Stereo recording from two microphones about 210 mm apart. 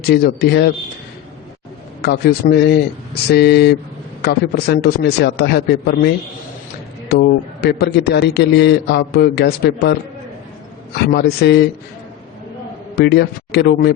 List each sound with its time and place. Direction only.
0.0 s a man's voice: 50° left (ahead or behind)
2.0 s a man's voice: 50° left (ahead or behind)
7.1 s a man's voice: 50° left (ahead or behind)
13.0 s a man's voice: 50° left (ahead or behind)